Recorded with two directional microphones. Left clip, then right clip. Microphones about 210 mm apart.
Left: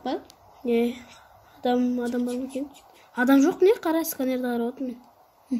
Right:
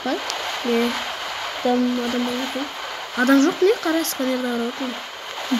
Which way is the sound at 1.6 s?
15° right (ahead or behind).